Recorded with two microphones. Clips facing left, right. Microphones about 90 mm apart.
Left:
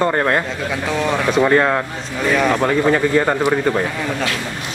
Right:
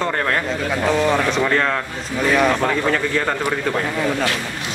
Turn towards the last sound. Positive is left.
turn(degrees=15)  # may be behind; listen again after turning